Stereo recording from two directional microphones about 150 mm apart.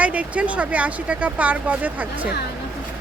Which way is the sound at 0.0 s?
10° right (ahead or behind).